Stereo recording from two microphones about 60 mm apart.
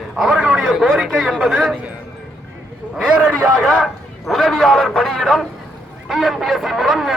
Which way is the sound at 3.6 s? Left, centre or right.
Centre.